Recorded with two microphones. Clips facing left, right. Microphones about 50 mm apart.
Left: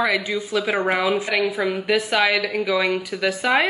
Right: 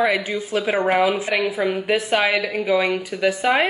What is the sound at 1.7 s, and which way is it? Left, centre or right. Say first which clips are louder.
A man's voice: right 1 dB; right.